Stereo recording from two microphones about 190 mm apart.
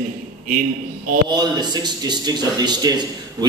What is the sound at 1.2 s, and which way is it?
A man's voice, 20° right (ahead or behind).